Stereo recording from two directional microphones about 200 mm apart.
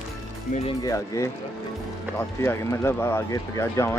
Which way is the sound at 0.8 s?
15° left (ahead or behind).